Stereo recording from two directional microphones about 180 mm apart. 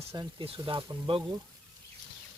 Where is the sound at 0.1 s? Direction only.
25° right (ahead or behind).